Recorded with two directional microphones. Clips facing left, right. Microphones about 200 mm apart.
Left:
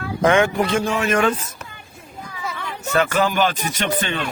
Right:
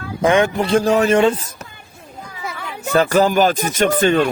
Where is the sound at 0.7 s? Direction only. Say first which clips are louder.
Right 6 dB; 35° right (ahead or behind).